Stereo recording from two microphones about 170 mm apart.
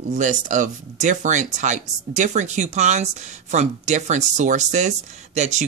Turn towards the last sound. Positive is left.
turn(degrees=-45)  # may be behind; listen again after turning